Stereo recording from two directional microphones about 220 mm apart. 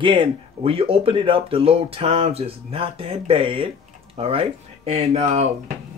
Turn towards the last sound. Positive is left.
turn(degrees=-30)  # may be behind; listen again after turning